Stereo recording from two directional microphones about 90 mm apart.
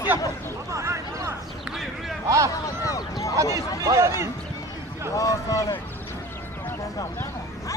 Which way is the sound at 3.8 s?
35° right (ahead or behind).